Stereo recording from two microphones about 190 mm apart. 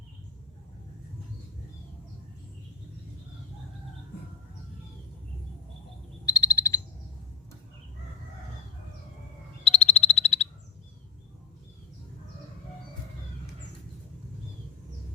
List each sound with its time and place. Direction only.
6.2 s frog: 20° left (ahead or behind)
9.6 s frog: 35° left (ahead or behind)